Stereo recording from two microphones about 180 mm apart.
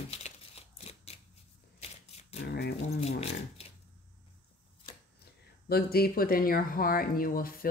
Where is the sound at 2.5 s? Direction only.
65° left (ahead or behind).